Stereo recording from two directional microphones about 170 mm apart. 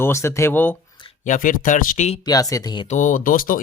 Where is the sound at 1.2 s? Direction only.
50° left (ahead or behind).